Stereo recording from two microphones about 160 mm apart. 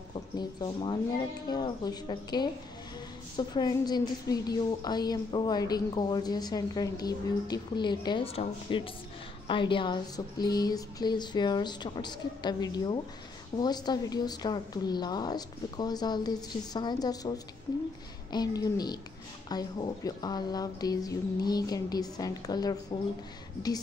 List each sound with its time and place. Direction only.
0.4 s a woman's voice: 30° left (ahead or behind)
18.3 s a woman's voice: 25° left (ahead or behind)